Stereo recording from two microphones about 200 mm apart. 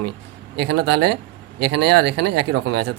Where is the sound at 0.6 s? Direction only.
60° right (ahead or behind).